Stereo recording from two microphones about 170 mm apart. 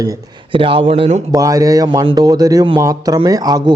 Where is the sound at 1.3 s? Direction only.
20° right (ahead or behind).